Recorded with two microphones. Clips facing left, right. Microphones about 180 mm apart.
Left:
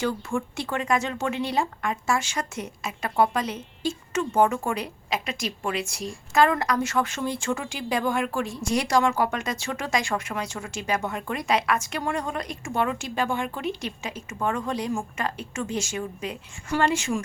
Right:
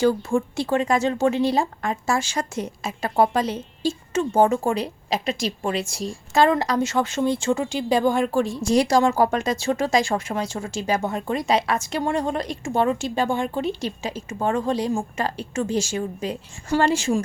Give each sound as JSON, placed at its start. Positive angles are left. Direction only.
{"t": 0.0, "sound": "speech", "side_deg": -30}